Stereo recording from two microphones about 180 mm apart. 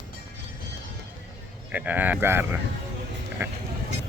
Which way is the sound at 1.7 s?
10° right (ahead or behind).